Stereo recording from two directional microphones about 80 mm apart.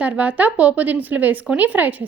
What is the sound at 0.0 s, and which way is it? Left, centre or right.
A woman's voice, centre.